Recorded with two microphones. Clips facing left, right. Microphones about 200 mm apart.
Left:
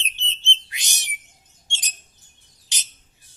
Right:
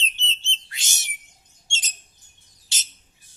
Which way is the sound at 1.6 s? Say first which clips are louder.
Right 1 dB; 15° left (ahead or behind).